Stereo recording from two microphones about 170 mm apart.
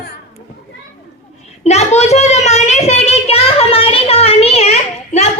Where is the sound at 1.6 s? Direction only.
40° left (ahead or behind).